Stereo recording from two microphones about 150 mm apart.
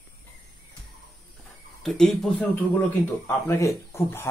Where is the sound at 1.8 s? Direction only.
Centre (ahead or behind).